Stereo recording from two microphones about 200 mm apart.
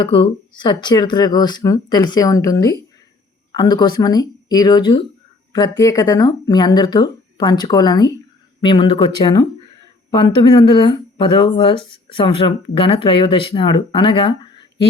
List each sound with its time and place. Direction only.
0.0 s speech: 25° left (ahead or behind)